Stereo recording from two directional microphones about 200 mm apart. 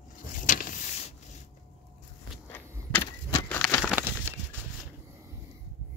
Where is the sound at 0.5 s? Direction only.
40° left (ahead or behind).